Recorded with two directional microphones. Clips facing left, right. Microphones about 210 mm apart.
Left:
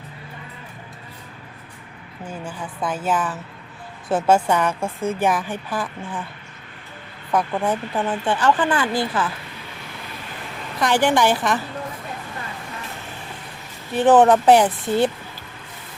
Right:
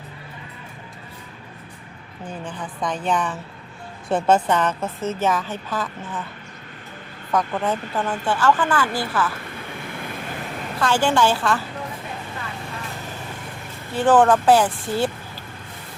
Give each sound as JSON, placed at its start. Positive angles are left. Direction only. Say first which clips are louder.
{"t": 2.2, "sound": "a woman's voice", "louder": "even", "side_deg": 10}
{"t": 7.3, "sound": "speech", "louder": "left 1 dB", "side_deg": 15}
{"t": 10.8, "sound": "a woman's voice", "louder": "left 1 dB", "side_deg": 15}
{"t": 13.9, "sound": "speech", "louder": "left 2 dB", "side_deg": 20}